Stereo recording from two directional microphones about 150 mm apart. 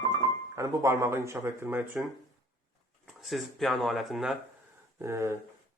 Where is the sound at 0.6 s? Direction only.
20° right (ahead or behind).